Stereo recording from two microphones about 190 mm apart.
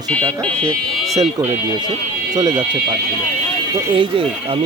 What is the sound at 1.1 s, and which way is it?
Speech, 20° right (ahead or behind).